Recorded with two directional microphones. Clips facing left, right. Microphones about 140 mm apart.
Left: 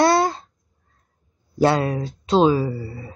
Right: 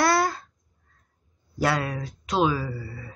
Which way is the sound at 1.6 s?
30° left (ahead or behind).